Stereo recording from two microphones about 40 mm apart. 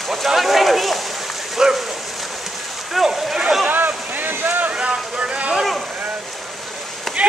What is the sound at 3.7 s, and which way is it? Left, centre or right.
Boat, right.